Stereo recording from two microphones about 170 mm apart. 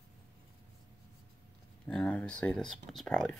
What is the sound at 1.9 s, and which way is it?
Speech, 5° left (ahead or behind).